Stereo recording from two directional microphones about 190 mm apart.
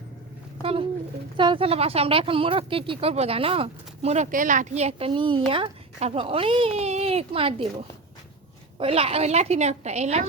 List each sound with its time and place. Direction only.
0.6 s a woman's voice: 30° right (ahead or behind)
8.8 s a woman's voice: 30° right (ahead or behind)